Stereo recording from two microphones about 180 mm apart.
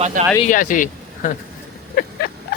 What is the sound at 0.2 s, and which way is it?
Speech, 45° right (ahead or behind).